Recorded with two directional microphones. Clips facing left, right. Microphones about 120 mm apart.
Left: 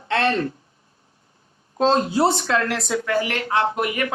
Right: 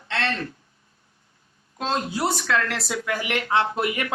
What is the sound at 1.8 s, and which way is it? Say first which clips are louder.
Speech: left 8 dB; 30° left (ahead or behind).